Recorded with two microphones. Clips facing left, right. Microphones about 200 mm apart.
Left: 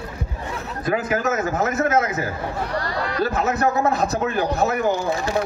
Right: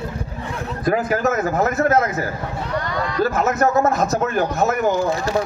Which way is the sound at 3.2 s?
40° right (ahead or behind).